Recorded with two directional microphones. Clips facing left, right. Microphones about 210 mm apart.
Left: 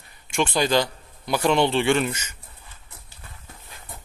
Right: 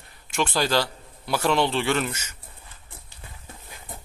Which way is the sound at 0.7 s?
15° left (ahead or behind).